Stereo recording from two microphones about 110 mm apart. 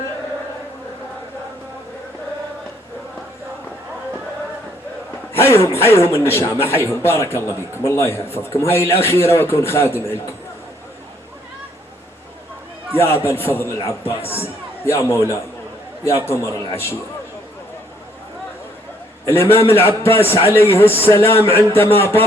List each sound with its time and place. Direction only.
5.3 s a man's voice: 25° left (ahead or behind)
12.9 s a man's voice: 20° left (ahead or behind)
19.2 s a man's voice: 25° left (ahead or behind)